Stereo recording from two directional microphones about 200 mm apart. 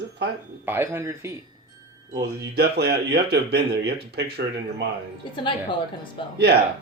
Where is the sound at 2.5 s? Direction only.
55° right (ahead or behind).